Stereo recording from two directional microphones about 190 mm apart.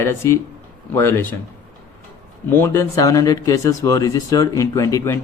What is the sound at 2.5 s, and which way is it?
Speech, 15° left (ahead or behind).